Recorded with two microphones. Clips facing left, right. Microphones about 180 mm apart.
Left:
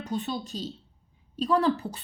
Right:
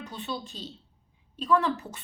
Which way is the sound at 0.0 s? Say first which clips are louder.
Left 5 dB; 40° left (ahead or behind).